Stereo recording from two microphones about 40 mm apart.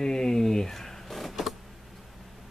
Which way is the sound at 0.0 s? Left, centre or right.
Centre.